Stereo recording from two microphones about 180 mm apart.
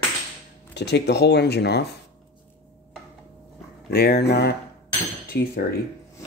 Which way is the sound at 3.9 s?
65° left (ahead or behind).